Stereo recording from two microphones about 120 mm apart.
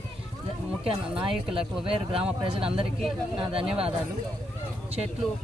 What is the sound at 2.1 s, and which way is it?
Speech, 50° right (ahead or behind).